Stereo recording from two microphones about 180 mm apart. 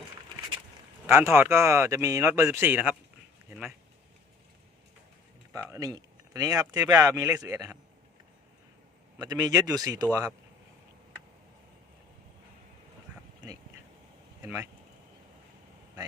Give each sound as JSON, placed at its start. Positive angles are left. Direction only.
{"t": 1.0, "sound": "speech", "side_deg": -15}
{"t": 5.7, "sound": "speech", "side_deg": -20}
{"t": 9.1, "sound": "speech", "side_deg": -20}
{"t": 14.4, "sound": "speech", "side_deg": -10}